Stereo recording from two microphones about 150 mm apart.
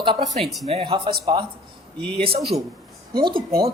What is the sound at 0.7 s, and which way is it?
Speech, 35° right (ahead or behind).